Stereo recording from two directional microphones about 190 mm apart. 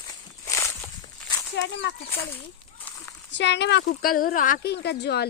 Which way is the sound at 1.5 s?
65° left (ahead or behind).